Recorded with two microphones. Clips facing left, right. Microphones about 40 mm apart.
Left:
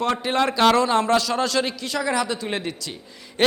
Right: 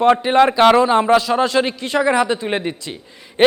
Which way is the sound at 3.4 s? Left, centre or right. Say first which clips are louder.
Right 7 dB; right.